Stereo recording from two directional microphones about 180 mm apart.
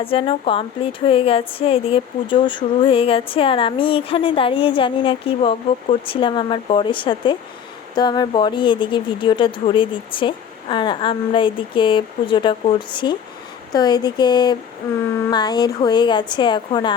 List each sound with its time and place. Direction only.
0.0 s a woman's voice: 30° left (ahead or behind)